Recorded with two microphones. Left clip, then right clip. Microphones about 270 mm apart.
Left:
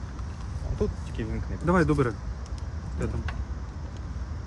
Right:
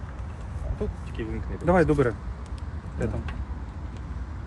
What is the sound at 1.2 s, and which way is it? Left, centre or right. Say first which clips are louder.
Speech: right 2 dB; left.